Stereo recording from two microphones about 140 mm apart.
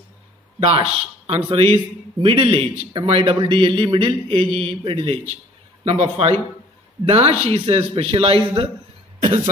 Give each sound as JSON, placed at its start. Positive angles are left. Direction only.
{"t": 0.6, "sound": "a man's voice", "side_deg": -40}